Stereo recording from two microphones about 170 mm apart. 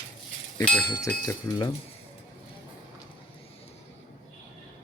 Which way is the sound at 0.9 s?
20° left (ahead or behind).